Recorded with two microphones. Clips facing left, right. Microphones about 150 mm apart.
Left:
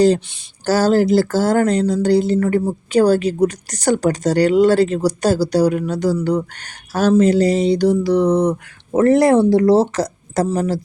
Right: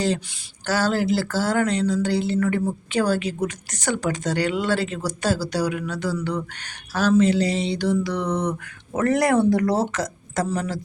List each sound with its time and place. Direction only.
0.6 s speech: 40° left (ahead or behind)